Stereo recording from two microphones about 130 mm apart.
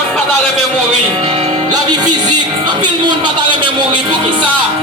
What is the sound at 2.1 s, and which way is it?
Music, 35° right (ahead or behind).